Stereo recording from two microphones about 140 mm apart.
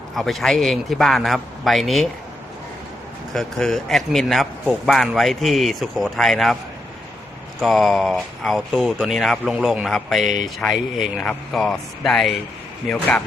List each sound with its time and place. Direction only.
0.2 s speech: centre (ahead or behind)
3.3 s speech: 5° left (ahead or behind)
7.6 s speech: centre (ahead or behind)
10.2 s speech: 65° right (ahead or behind)
10.6 s speech: 5° left (ahead or behind)